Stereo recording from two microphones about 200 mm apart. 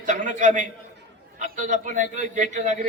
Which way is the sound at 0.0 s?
40° right (ahead or behind).